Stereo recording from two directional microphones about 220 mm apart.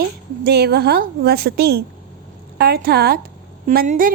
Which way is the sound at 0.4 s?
45° right (ahead or behind).